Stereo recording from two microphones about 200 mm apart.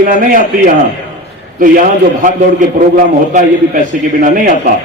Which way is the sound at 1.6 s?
40° right (ahead or behind).